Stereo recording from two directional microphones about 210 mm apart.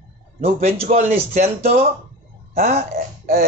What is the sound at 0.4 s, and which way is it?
Speech, 30° right (ahead or behind).